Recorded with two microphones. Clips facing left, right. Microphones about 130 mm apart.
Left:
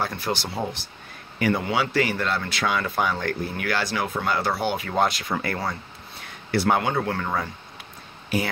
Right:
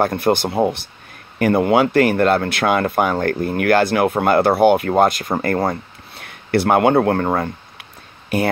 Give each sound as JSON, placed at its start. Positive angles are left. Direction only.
{"t": 0.0, "sound": "speech", "side_deg": -55}